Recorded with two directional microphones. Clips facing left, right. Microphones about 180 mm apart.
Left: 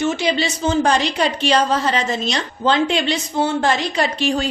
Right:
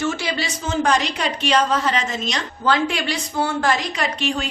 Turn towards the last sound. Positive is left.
turn(degrees=35)  # may be behind; listen again after turning